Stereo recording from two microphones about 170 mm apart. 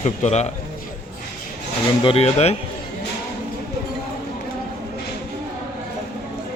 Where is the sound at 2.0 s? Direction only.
35° left (ahead or behind).